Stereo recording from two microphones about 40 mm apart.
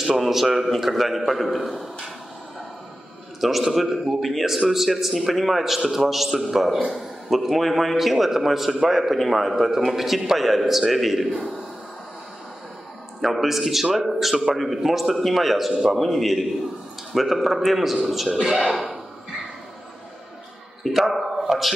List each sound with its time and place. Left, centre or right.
0.0 s a man's voice: centre
3.3 s a man's voice: centre
13.2 s a man's voice: centre
20.8 s a man's voice: centre